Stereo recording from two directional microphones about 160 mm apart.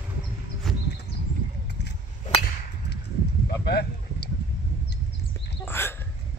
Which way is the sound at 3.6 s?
90° left.